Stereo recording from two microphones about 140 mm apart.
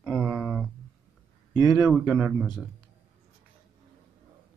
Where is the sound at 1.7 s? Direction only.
10° right (ahead or behind).